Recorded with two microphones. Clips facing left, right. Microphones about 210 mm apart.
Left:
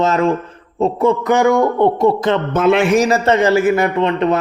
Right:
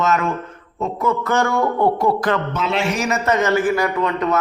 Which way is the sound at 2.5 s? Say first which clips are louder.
Left 9 dB; 50° left (ahead or behind).